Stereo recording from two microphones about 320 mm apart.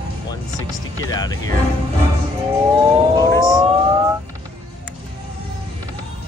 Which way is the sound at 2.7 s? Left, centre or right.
Centre.